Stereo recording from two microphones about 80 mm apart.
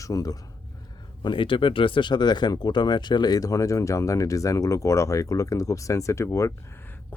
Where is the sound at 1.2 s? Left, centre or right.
Left.